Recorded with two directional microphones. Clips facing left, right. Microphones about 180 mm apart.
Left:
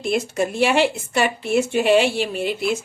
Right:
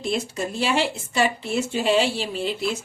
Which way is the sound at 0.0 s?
60° left (ahead or behind).